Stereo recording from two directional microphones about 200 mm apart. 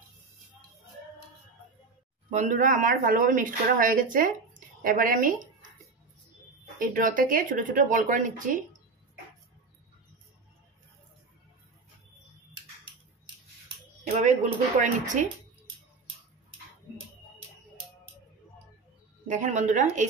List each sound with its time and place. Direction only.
2.3 s speech: 40° right (ahead or behind)
6.8 s speech: 45° right (ahead or behind)
14.0 s speech: 35° right (ahead or behind)
19.2 s speech: 35° right (ahead or behind)